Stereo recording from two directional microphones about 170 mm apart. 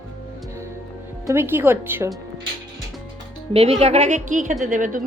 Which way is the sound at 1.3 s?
15° right (ahead or behind).